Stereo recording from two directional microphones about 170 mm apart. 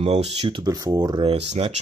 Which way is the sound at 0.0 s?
40° right (ahead or behind).